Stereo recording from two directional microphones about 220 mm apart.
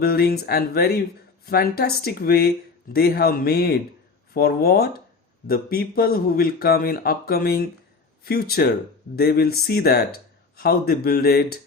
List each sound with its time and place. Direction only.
0.0 s speech: 45° left (ahead or behind)